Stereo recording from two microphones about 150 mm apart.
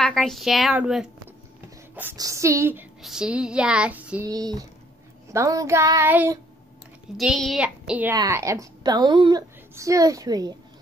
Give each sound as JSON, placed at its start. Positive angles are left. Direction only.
{"t": 0.0, "sound": "child singing", "side_deg": 5}
{"t": 2.1, "sound": "a woman's voice", "side_deg": -20}
{"t": 3.0, "sound": "child singing", "side_deg": -5}
{"t": 4.3, "sound": "a woman's voice", "side_deg": -25}
{"t": 7.2, "sound": "child singing", "side_deg": 0}
{"t": 8.1, "sound": "a woman's voice", "side_deg": -20}